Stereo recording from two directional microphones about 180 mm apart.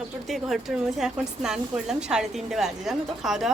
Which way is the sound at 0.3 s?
Centre (ahead or behind).